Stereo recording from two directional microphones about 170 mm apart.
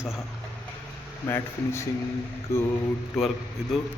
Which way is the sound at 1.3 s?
15° left (ahead or behind).